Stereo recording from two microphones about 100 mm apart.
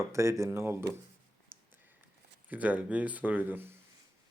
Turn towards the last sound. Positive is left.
turn(degrees=-20)  # may be behind; listen again after turning